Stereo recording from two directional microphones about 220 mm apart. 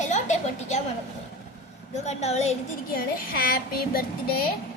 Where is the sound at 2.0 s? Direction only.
30° left (ahead or behind).